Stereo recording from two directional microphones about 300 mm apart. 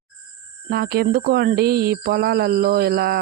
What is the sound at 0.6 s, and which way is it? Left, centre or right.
Speech, right.